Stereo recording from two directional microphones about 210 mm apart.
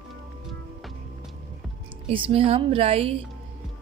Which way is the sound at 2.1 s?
25° right (ahead or behind).